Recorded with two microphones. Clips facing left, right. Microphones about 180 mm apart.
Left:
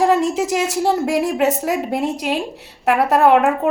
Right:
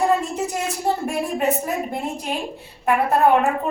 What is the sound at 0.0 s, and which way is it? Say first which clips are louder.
A woman's voice: left 5 dB; 90° left.